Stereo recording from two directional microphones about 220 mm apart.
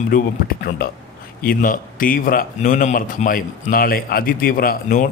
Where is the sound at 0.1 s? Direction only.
40° left (ahead or behind).